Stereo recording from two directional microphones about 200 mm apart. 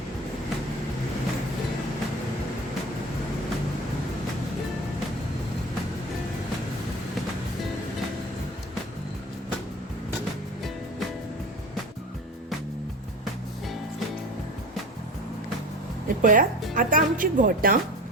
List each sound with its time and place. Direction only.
16.0 s music: 40° right (ahead or behind)
16.7 s speech: 45° right (ahead or behind)